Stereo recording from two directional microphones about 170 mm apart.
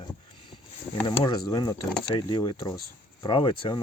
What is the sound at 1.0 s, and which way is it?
Speech, 25° left (ahead or behind).